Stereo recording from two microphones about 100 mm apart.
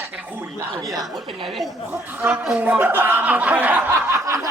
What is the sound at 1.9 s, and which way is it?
Speech, 15° right (ahead or behind).